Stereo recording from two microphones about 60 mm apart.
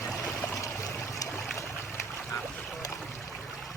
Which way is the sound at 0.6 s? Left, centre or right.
Left.